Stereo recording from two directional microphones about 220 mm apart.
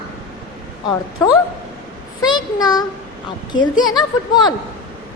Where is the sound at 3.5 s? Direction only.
60° left (ahead or behind).